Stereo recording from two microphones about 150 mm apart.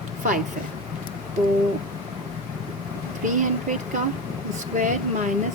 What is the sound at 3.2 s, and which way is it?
Speech, 55° right (ahead or behind).